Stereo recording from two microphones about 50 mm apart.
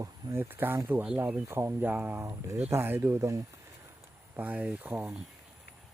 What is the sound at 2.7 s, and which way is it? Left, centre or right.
Speech, right.